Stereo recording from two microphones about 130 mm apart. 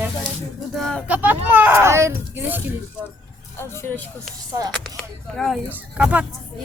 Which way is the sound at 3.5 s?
20° left (ahead or behind).